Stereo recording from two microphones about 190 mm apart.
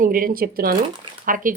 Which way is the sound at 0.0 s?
45° right (ahead or behind).